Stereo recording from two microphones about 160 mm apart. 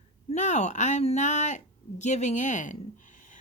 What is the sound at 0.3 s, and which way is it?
Speech, 50° left (ahead or behind).